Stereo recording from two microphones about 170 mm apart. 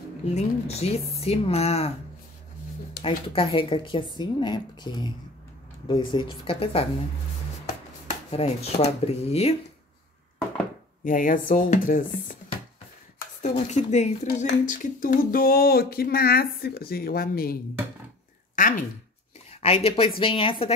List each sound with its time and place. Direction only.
0.2 s speech: 40° left (ahead or behind)
3.0 s speech: 30° left (ahead or behind)
8.1 s speech: 40° left (ahead or behind)
11.1 s speech: 55° left (ahead or behind)
13.4 s speech: 45° left (ahead or behind)
14.2 s speech: 90° left
14.7 s speech: 50° left (ahead or behind)
18.6 s speech: 55° left (ahead or behind)
19.6 s speech: 35° left (ahead or behind)